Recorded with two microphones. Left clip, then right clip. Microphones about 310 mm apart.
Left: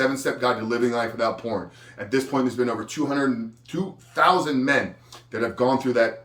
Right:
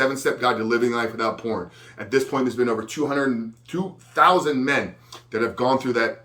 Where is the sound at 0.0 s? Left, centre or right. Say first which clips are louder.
Right 2 dB; centre.